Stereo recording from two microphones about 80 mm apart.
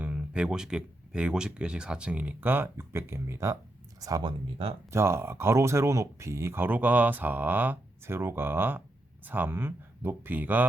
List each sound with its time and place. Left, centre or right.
0.0 s speech: centre; by 3.6 s right
4.2 s speech: right
4.9 s speech: right